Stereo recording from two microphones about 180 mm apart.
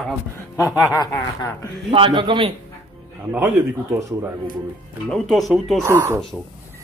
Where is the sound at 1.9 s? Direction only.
30° right (ahead or behind).